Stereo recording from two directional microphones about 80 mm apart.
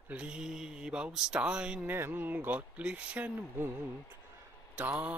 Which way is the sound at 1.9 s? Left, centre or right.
Right.